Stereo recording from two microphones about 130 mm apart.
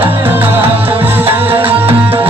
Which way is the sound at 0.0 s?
15° right (ahead or behind).